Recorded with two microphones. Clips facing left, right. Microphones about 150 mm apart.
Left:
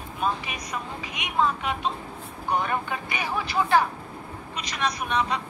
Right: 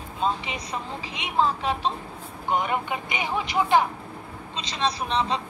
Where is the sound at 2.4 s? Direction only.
20° right (ahead or behind).